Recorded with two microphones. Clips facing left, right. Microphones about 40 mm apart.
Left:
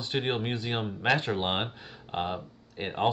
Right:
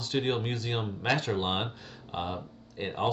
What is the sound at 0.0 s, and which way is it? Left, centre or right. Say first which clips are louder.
Speech: even; left.